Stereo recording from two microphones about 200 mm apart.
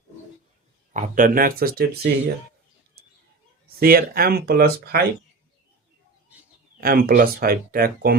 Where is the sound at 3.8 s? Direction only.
45° right (ahead or behind).